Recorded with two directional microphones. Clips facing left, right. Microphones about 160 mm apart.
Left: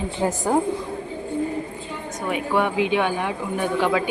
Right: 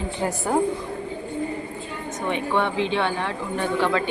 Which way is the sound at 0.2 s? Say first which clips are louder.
Left 3 dB; 20° left (ahead or behind).